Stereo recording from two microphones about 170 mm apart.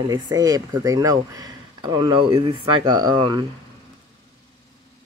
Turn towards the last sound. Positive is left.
turn(degrees=-25)  # may be behind; listen again after turning